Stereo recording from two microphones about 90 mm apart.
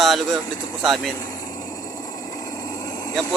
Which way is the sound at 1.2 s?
45° left (ahead or behind).